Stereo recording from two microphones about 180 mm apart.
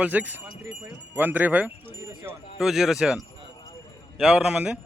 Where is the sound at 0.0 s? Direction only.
10° right (ahead or behind).